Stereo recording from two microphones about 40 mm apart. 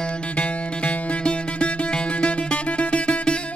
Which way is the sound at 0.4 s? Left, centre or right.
Left.